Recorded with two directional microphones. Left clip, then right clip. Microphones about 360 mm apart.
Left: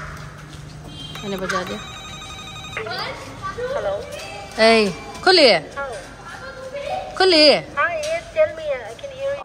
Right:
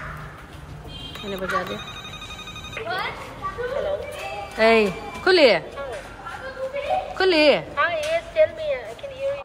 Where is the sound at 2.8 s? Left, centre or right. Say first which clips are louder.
Left 2 dB; centre.